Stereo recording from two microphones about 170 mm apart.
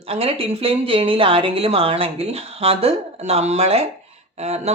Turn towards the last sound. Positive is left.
turn(degrees=-40)  # may be behind; listen again after turning